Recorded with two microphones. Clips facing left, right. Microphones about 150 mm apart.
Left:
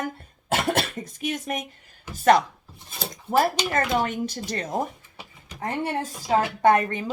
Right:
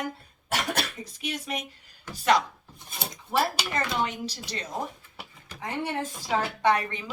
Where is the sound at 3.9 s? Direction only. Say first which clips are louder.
Left 5 dB; 50° left (ahead or behind).